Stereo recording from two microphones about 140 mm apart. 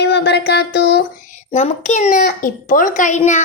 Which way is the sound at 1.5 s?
50° left (ahead or behind).